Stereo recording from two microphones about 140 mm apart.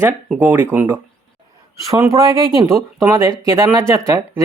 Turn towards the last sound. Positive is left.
turn(degrees=-20)  # may be behind; listen again after turning